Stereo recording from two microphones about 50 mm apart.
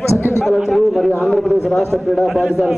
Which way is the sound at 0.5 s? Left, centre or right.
Centre.